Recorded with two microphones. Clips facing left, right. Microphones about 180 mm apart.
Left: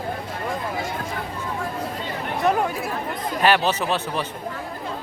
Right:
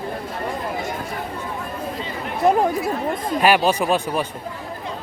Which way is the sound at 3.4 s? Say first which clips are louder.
Right 2 dB; 10° right (ahead or behind).